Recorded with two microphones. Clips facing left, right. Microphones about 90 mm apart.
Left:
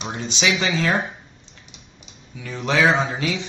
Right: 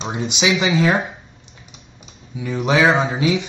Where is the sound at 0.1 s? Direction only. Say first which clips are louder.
Right 3 dB; 15° right (ahead or behind).